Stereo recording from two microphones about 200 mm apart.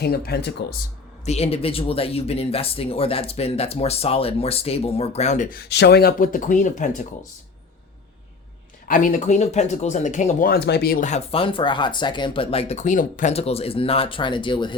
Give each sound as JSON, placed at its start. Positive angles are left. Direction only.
{"t": 0.0, "sound": "speech", "side_deg": 50}
{"t": 1.2, "sound": "speech", "side_deg": 30}
{"t": 8.9, "sound": "speech", "side_deg": 40}